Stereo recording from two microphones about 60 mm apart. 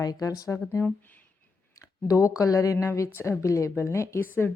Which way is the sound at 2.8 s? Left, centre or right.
Left.